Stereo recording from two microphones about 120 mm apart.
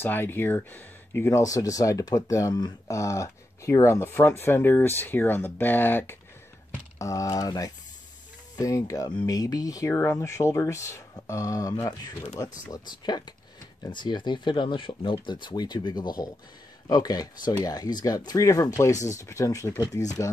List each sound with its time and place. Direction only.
0.0 s speech: 15° left (ahead or behind)